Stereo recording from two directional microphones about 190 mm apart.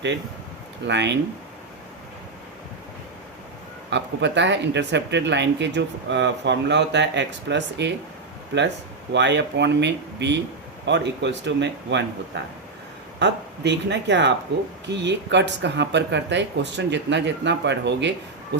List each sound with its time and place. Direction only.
0.9 s speech: 65° right (ahead or behind)
3.8 s speech: 65° right (ahead or behind)
9.1 s speech: 65° right (ahead or behind)
13.1 s speech: 65° right (ahead or behind)